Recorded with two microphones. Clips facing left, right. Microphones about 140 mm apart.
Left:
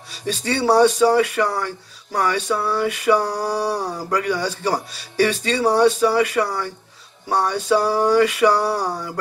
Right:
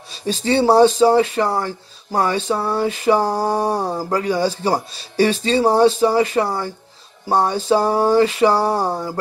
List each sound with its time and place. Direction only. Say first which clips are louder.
0.1 s speech: right 5 dB; 25° right (ahead or behind)